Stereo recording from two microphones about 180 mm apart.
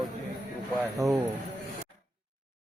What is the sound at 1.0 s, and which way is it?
Speech, 20° right (ahead or behind).